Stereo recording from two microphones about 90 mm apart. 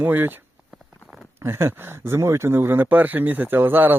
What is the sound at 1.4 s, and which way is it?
Speech, 30° right (ahead or behind).